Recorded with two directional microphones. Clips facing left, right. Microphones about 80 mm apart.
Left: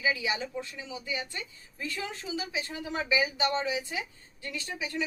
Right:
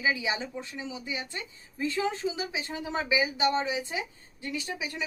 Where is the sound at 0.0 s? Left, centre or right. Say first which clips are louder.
Right 1 dB; right.